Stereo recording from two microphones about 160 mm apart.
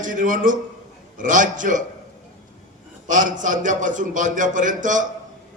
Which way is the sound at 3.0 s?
55° right (ahead or behind).